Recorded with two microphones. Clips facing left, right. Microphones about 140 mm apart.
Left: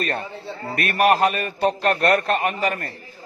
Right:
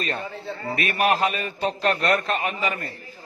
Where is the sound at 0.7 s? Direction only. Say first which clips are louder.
Left 4 dB; 50° left (ahead or behind).